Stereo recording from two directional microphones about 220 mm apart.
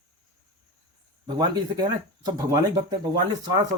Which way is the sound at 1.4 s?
20° right (ahead or behind).